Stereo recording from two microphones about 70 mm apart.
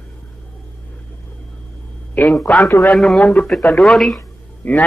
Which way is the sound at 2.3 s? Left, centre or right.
Centre.